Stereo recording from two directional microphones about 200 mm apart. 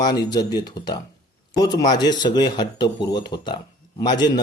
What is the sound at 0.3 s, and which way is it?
Speech, 20° left (ahead or behind).